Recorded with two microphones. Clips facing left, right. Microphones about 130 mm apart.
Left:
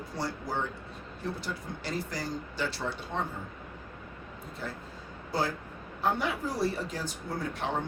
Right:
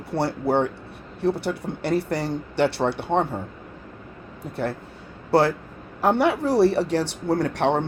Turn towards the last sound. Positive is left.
turn(degrees=-75)  # may be behind; listen again after turning